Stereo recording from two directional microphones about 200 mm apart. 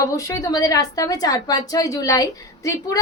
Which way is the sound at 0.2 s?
15° left (ahead or behind).